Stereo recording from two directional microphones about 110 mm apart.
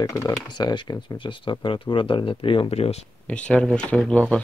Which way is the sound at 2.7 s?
70° left (ahead or behind).